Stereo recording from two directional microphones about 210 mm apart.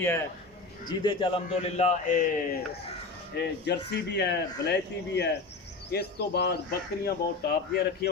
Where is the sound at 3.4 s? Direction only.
55° left (ahead or behind).